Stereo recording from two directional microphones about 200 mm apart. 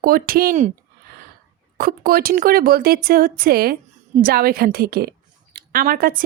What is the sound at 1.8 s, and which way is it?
Speech, 45° right (ahead or behind).